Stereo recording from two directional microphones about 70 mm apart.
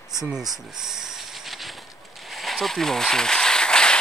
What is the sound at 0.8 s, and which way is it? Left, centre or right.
Train, centre.